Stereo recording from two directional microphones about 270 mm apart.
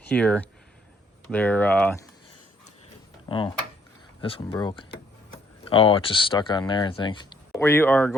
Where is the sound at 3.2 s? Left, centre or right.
Centre.